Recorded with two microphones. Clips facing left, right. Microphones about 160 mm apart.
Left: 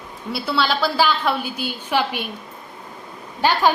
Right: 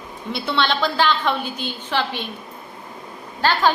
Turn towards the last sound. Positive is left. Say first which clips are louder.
# left 1 dB
turn(degrees=15)  # may be behind; listen again after turning